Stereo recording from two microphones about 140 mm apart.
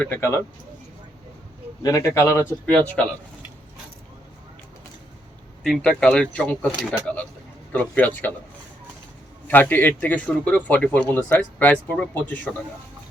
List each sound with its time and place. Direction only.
0.0 s a man's voice: 15° left (ahead or behind)
1.8 s a man's voice: 25° left (ahead or behind)
5.6 s a man's voice: 5° left (ahead or behind)
9.5 s a man's voice: 15° left (ahead or behind)